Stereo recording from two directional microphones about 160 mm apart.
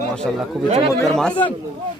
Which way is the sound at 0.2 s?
5° left (ahead or behind).